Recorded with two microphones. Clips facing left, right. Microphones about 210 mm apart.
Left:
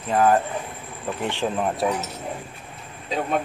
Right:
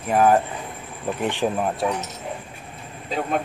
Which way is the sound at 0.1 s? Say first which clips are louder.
Right 1 dB; 15° right (ahead or behind).